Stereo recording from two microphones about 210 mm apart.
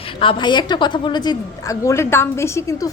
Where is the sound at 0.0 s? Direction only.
25° left (ahead or behind).